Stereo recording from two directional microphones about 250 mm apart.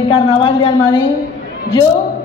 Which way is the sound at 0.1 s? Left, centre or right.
Left.